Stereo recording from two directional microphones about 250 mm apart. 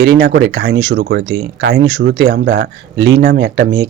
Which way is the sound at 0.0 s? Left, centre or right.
Right.